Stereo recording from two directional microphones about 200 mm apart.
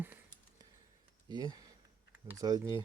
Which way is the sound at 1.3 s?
20° right (ahead or behind).